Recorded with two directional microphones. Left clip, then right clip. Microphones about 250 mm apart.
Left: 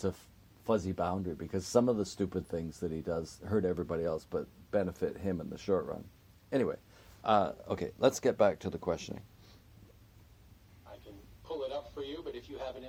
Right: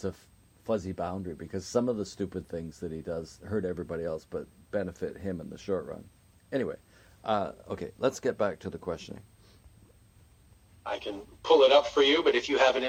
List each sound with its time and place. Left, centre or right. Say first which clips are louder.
0.6 s speech: even; centre
10.8 s a man's voice: right 18 dB; right